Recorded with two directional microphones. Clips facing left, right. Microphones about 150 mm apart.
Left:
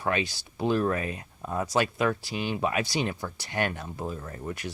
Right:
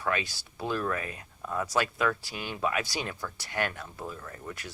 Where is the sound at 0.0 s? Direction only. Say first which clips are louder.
Left 3 dB; 25° left (ahead or behind).